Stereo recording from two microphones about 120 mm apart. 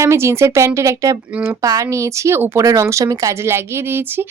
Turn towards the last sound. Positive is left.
turn(degrees=-20)  # may be behind; listen again after turning